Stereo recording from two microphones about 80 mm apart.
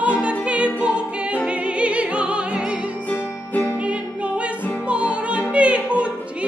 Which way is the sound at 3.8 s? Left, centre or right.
Centre.